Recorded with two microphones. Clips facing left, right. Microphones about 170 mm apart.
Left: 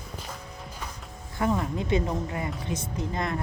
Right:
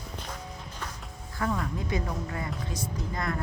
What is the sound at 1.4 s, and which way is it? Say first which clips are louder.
Speech: left 4 dB; 20° left (ahead or behind).